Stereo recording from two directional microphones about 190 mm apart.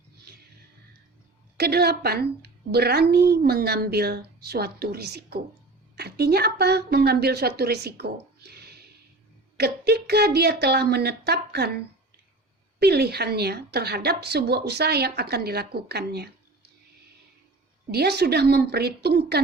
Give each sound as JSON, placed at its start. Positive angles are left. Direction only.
{"t": 1.5, "sound": "a woman's voice", "side_deg": -55}
{"t": 12.8, "sound": "a woman's voice", "side_deg": -55}
{"t": 17.9, "sound": "a woman's voice", "side_deg": -60}